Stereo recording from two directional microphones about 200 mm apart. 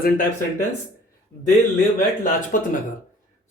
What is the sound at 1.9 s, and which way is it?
Speech, 40° left (ahead or behind).